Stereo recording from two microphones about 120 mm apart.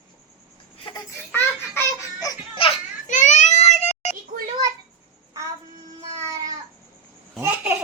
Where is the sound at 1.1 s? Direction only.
20° left (ahead or behind).